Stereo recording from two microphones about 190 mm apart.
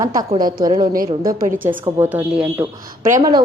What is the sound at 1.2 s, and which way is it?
Speech, 50° right (ahead or behind).